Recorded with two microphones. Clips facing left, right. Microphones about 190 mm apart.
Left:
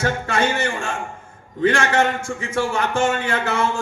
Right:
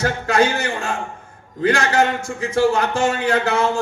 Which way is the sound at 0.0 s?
35° right (ahead or behind).